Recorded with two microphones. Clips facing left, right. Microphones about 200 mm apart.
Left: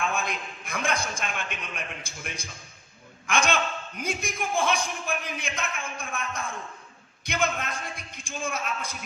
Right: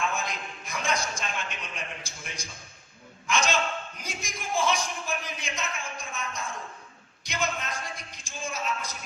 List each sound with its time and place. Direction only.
0.1 s a man's voice: 55° left (ahead or behind)